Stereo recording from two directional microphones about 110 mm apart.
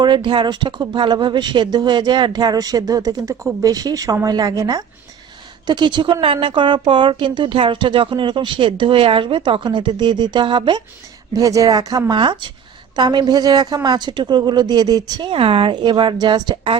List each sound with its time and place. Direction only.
0.0 s speech: 45° right (ahead or behind)
5.6 s a woman's voice: 45° right (ahead or behind)
11.3 s speech: 30° right (ahead or behind)
15.3 s a woman's voice: 55° right (ahead or behind)